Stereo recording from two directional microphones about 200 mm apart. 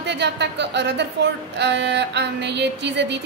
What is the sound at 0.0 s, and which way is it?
A woman's voice, 60° right (ahead or behind).